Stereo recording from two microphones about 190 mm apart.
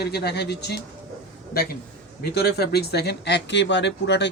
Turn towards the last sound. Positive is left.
turn(degrees=65)  # may be behind; listen again after turning